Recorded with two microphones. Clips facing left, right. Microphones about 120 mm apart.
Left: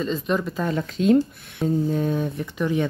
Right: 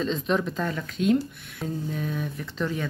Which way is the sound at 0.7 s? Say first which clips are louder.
Left 6 dB; 25° left (ahead or behind).